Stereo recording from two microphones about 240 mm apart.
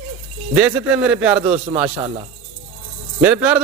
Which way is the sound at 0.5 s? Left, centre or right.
Centre.